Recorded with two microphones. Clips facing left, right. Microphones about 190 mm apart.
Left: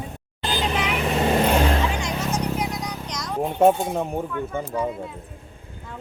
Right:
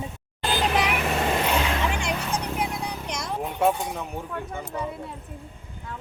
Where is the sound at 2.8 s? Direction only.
30° right (ahead or behind).